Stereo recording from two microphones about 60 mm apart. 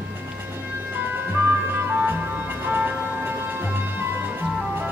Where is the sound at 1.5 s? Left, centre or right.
Right.